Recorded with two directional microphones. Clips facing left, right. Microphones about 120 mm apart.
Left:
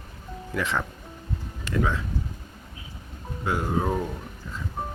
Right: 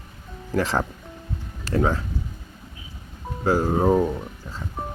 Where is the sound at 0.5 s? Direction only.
35° right (ahead or behind).